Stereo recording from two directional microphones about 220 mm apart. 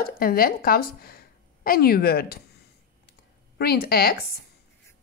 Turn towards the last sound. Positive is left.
turn(degrees=45)  # may be behind; listen again after turning